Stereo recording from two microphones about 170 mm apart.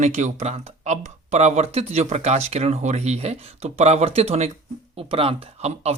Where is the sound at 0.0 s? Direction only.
45° right (ahead or behind).